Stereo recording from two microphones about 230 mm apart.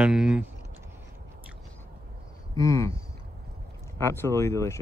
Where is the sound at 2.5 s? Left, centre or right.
Centre.